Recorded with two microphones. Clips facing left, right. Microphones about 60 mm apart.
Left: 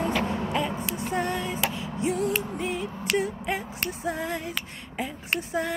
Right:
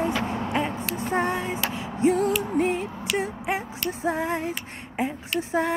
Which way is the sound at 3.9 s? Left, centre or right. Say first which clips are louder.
Right 5 dB; right.